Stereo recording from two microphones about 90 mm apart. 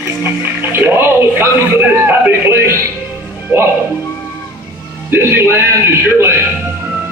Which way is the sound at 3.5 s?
25° right (ahead or behind).